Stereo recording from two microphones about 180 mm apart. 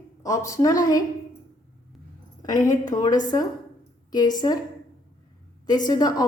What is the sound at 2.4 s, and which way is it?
A woman's voice, 20° left (ahead or behind).